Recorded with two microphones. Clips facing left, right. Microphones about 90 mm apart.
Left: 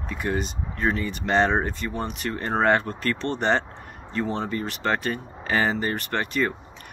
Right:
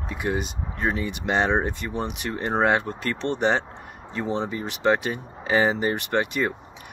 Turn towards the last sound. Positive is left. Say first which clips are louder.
# right 1 dB
turn(degrees=-15)  # may be behind; listen again after turning